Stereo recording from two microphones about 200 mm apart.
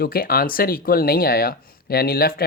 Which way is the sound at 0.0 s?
50° left (ahead or behind).